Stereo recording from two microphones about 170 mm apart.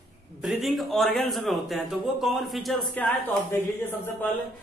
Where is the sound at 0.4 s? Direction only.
Centre (ahead or behind).